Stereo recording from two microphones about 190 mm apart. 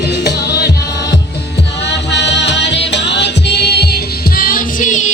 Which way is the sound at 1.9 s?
65° left (ahead or behind).